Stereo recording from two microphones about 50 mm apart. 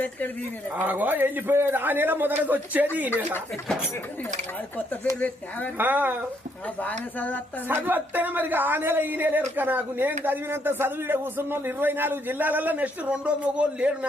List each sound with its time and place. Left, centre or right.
0.8 s a woman's voice: right
5.2 s speech: left
5.7 s a woman's voice: right
6.7 s speech: left
7.8 s a woman's voice: right